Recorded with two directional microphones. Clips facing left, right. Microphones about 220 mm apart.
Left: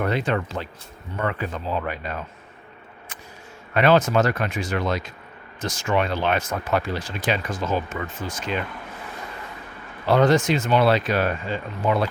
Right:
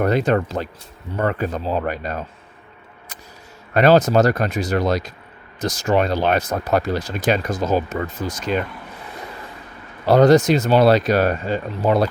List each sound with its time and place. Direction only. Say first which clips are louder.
0.0 s speech: right 6 dB; 40° right (ahead or behind)
3.8 s speech: right 4 dB; 40° right (ahead or behind)
10.1 s speech: right 5 dB; 40° right (ahead or behind)